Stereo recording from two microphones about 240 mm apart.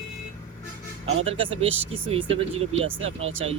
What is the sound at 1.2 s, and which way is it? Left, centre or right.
Speech, right.